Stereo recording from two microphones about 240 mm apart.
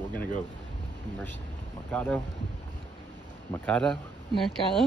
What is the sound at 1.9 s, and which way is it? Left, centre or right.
Speech, centre.